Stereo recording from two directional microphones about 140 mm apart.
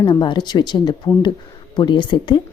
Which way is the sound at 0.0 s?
35° left (ahead or behind).